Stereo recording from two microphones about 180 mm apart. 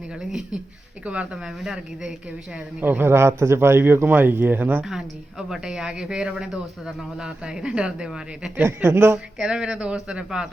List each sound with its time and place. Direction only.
0.1 s a woman's voice: 5° right (ahead or behind)